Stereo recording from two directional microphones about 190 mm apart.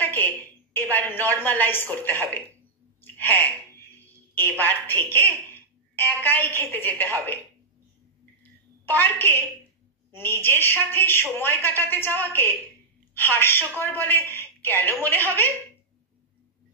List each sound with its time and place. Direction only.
0.0 s a sound: 10° left (ahead or behind)
0.9 s speech: 10° left (ahead or behind)
4.0 s music: 10° left (ahead or behind)
4.6 s a woman's voice: 10° left (ahead or behind)
8.8 s speech: 10° left (ahead or behind)